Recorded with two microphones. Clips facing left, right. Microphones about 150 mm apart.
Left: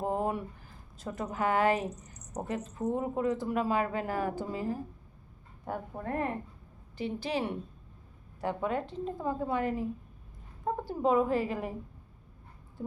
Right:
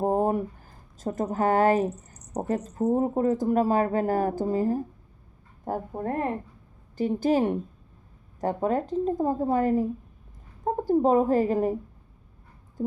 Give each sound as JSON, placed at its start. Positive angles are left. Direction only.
{"t": 0.0, "sound": "a woman's voice", "side_deg": -40}